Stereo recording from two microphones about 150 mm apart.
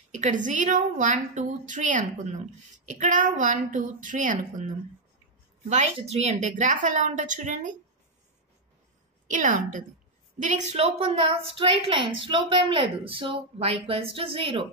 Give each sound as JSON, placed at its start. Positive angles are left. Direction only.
{"t": 0.1, "sound": "a woman's voice", "side_deg": -55}
{"t": 5.9, "sound": "a woman's voice", "side_deg": -45}
{"t": 9.3, "sound": "a woman's voice", "side_deg": -60}